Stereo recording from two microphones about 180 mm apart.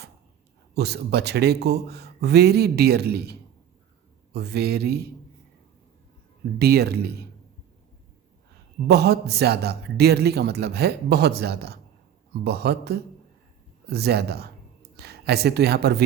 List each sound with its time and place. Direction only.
0.8 s a man's voice: 65° right (ahead or behind)
6.6 s a man's voice: 60° right (ahead or behind)
8.9 s a man's voice: 65° right (ahead or behind)